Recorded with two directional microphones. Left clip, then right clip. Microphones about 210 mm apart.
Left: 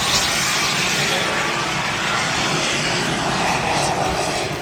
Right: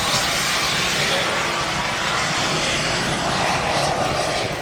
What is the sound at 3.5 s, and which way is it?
Vehicle, 15° right (ahead or behind).